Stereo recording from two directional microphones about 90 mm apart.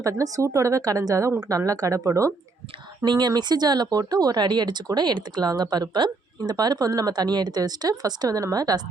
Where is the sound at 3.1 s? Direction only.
55° right (ahead or behind).